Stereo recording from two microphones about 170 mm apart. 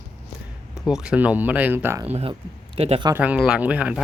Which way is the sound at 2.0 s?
35° right (ahead or behind).